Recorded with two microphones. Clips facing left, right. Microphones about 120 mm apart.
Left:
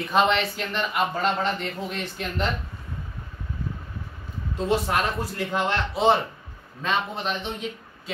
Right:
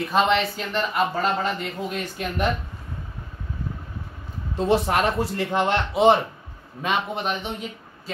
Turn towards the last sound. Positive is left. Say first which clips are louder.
# right 2 dB
turn(degrees=-10)  # may be behind; listen again after turning